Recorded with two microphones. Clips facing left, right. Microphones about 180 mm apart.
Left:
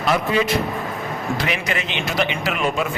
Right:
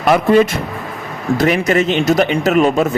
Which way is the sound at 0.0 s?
55° right (ahead or behind).